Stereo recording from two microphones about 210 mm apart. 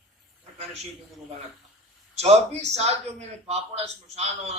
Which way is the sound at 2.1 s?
30° right (ahead or behind).